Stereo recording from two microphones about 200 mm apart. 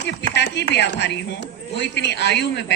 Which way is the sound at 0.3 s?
60° left (ahead or behind).